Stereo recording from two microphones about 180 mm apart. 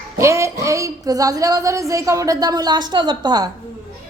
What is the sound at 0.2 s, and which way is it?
Speech, 15° right (ahead or behind).